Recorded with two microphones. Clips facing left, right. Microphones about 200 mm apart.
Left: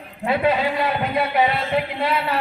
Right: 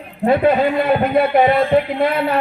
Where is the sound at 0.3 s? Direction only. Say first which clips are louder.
Right 6 dB; 55° right (ahead or behind).